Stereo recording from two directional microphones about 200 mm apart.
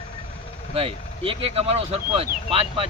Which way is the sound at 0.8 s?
25° right (ahead or behind).